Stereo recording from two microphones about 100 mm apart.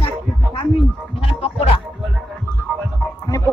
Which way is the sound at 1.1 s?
90° left.